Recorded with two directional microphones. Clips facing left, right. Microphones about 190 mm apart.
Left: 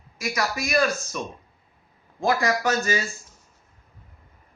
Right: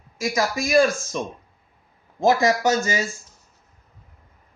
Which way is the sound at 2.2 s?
20° right (ahead or behind).